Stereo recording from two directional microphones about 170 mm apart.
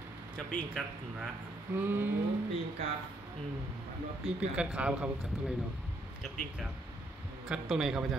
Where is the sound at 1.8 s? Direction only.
10° right (ahead or behind).